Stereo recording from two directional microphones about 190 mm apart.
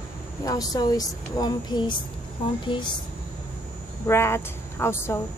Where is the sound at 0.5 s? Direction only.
20° left (ahead or behind).